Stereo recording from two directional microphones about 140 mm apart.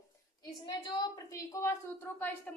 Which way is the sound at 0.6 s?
30° left (ahead or behind).